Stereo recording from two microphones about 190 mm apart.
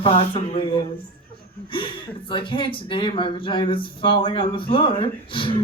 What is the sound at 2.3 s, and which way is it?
Speech, 25° left (ahead or behind).